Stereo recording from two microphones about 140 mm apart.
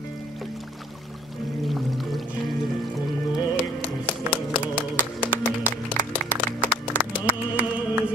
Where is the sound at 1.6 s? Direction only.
Centre (ahead or behind); by 6.1 s 20° left (ahead or behind).